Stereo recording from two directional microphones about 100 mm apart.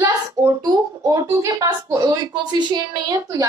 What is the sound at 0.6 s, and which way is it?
Speech, 30° right (ahead or behind).